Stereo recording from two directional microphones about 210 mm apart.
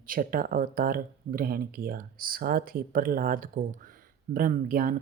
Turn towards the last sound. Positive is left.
turn(degrees=-45)  # may be behind; listen again after turning